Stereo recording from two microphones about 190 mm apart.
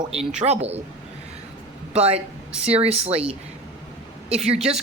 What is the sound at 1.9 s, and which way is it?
A man's voice, 30° right (ahead or behind).